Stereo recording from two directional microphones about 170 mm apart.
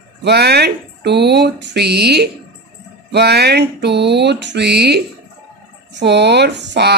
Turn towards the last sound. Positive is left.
turn(degrees=-85)